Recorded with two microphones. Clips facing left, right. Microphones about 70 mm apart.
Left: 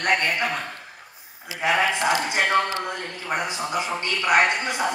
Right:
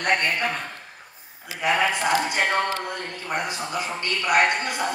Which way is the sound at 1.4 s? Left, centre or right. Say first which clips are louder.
Left 1 dB; left.